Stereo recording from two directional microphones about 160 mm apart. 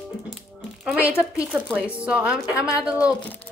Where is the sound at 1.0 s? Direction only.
15° left (ahead or behind).